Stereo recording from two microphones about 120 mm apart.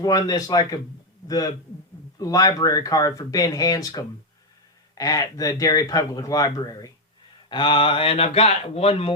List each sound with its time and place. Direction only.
0.0 s speech: 30° left (ahead or behind)
7.5 s speech: 45° left (ahead or behind)